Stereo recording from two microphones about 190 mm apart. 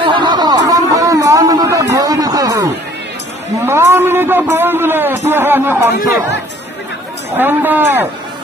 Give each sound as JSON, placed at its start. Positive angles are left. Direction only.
{"t": 0.0, "sound": "a sound", "side_deg": -25}
{"t": 3.6, "sound": "a man's voice", "side_deg": -15}
{"t": 7.3, "sound": "a man's voice", "side_deg": -10}